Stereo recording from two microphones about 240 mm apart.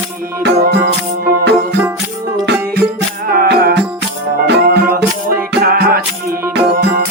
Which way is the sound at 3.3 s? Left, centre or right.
Right.